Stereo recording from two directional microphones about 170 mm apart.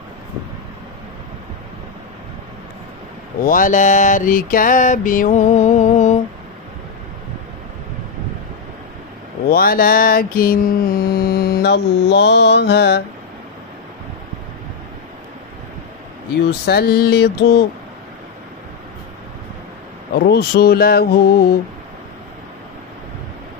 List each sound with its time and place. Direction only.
3.4 s mantra: 50° left (ahead or behind)
9.5 s mantra: 60° left (ahead or behind); by 13.0 s 80° left
16.4 s speech: 70° left (ahead or behind)
20.2 s mantra: 70° left (ahead or behind)